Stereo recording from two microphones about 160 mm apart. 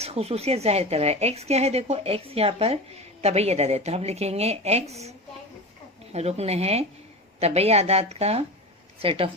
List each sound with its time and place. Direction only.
0.0 s a woman's voice: 40° right (ahead or behind)
6.1 s a woman's voice: 40° right (ahead or behind)